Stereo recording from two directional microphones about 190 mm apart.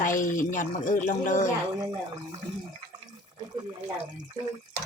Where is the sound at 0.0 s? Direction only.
45° left (ahead or behind).